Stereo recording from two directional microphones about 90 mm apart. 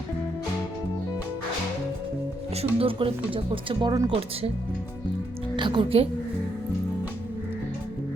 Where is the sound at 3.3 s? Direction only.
75° right (ahead or behind).